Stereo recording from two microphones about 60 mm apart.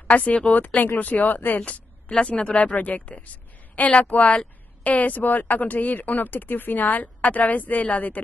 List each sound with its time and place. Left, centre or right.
0.1 s speech: left
1.6 s speech: centre